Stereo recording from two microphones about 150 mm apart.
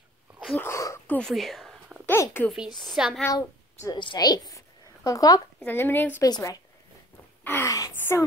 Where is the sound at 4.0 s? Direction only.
30° left (ahead or behind).